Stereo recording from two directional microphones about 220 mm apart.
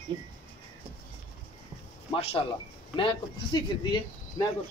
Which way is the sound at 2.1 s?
25° left (ahead or behind).